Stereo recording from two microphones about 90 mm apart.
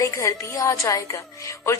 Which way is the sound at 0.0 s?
35° left (ahead or behind).